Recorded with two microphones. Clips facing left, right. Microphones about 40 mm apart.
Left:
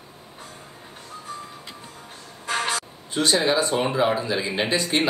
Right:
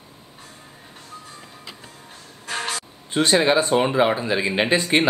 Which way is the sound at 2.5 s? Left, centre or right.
Centre.